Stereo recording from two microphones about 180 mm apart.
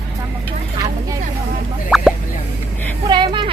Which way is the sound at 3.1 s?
25° right (ahead or behind).